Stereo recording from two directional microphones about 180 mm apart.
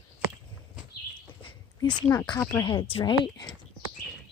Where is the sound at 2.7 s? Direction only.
30° left (ahead or behind).